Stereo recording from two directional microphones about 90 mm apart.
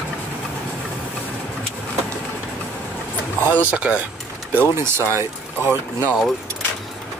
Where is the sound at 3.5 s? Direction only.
20° left (ahead or behind).